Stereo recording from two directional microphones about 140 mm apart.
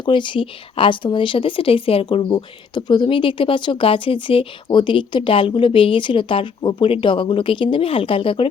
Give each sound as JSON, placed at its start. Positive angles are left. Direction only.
{"t": 0.0, "sound": "speech", "side_deg": 35}